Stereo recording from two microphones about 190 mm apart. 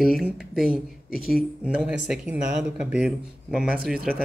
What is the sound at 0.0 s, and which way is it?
Speech, centre (ahead or behind).